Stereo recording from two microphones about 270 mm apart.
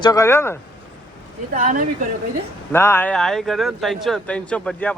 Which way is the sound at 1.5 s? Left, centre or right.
Right.